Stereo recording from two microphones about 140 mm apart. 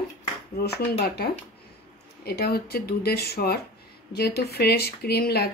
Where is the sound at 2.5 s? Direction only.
90° left.